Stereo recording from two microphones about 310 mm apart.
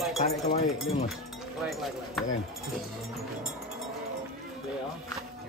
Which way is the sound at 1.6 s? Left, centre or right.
Centre.